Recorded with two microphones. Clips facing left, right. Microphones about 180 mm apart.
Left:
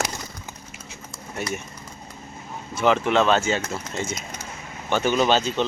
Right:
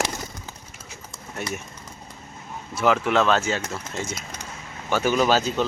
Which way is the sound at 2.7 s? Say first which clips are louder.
Left 1 dB; 5° right (ahead or behind).